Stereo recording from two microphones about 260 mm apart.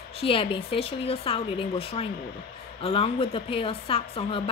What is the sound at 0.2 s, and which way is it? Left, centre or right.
A woman's voice, left.